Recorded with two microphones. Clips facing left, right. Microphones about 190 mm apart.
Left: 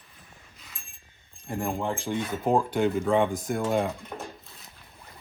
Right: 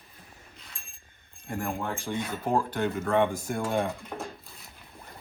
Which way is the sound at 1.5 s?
20° left (ahead or behind).